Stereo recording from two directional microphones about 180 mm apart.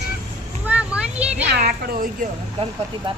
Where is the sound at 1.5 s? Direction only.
60° right (ahead or behind).